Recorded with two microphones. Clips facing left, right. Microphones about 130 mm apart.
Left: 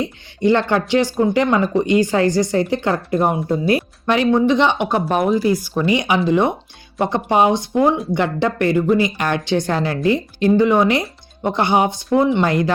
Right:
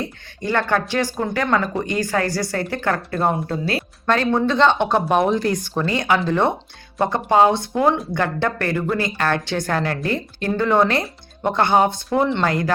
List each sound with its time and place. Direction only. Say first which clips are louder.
0.0 s a woman's voice: left 8 dB; 20° left (ahead or behind)
5.0 s a woman's voice: left 1 dB; centre (ahead or behind); by 12.7 s 20° left (ahead or behind)